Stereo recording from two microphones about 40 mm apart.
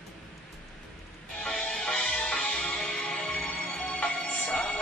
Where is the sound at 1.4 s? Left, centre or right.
Centre.